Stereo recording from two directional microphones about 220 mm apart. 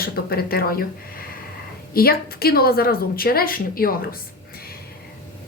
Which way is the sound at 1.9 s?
45° left (ahead or behind).